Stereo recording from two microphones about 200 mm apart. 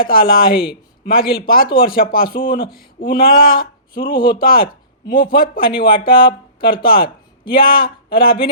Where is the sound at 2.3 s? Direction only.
25° left (ahead or behind).